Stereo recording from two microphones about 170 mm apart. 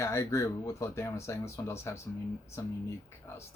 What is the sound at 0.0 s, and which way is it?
Speech, 15° left (ahead or behind).